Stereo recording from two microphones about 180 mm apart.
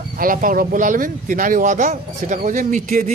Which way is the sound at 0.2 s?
50° right (ahead or behind).